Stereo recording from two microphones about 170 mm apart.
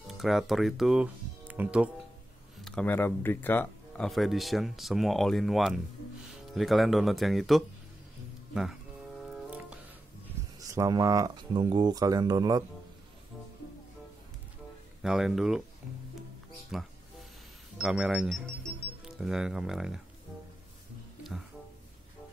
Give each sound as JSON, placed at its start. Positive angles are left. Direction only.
{"t": 0.2, "sound": "speech", "side_deg": 0}
{"t": 2.6, "sound": "speech", "side_deg": 5}
{"t": 9.2, "sound": "music", "side_deg": -5}
{"t": 10.6, "sound": "speech", "side_deg": -20}
{"t": 15.0, "sound": "speech", "side_deg": 0}
{"t": 16.7, "sound": "speech", "side_deg": 0}
{"t": 21.2, "sound": "music", "side_deg": 0}